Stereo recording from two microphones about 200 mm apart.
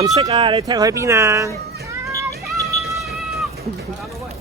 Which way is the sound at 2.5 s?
Centre (ahead or behind).